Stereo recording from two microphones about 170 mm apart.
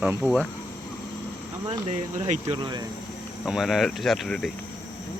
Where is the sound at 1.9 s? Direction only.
40° right (ahead or behind).